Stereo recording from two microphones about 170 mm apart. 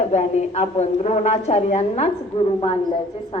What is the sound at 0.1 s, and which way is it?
A woman's voice, 40° left (ahead or behind).